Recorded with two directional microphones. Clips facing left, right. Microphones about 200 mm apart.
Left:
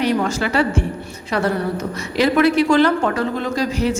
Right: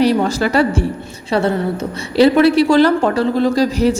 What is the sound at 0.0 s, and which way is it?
Speech, 35° right (ahead or behind).